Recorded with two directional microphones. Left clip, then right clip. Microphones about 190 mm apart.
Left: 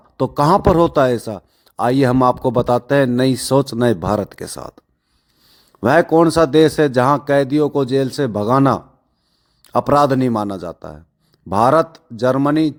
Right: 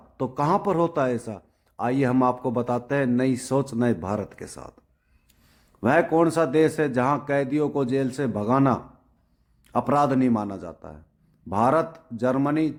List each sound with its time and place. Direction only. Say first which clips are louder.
0.2 s a man's voice: left 9 dB; 45° left (ahead or behind)
5.8 s a man's voice: left 7 dB; 40° left (ahead or behind)